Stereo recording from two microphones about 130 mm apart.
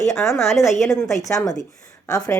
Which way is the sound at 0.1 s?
Centre (ahead or behind).